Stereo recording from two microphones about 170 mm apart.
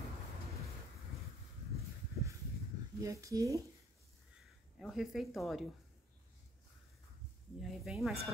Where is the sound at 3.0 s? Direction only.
20° right (ahead or behind).